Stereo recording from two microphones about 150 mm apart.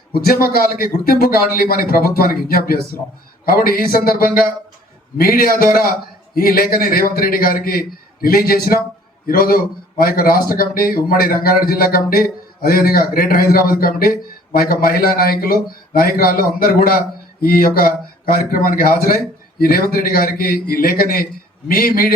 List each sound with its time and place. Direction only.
0.1 s a man's voice: 90° left